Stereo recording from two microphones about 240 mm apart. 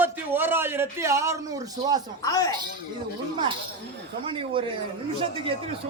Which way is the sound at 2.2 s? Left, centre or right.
Centre.